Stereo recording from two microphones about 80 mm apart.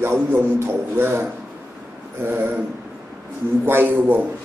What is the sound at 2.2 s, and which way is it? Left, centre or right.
Speech, right.